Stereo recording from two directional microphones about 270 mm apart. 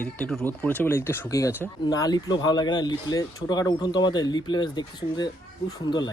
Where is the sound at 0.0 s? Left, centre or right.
Centre.